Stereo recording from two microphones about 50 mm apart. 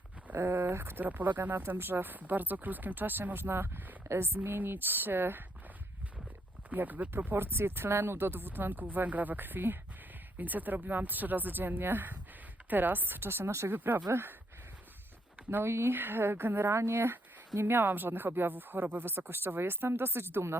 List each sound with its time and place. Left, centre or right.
0.3 s speech: right
1.0 s speech: right
4.1 s speech: right
4.4 s speech: right
6.7 s speech: right
7.3 s speech: right
13.7 s speech: right
15.4 s speech: right
16.0 s speech: right
17.7 s speech: right